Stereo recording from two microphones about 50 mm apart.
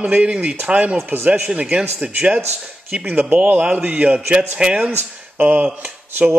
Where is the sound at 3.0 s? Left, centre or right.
Right.